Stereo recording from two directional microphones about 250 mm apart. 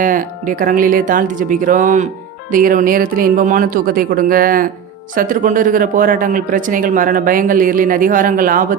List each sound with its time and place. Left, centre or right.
0.0 s speech: right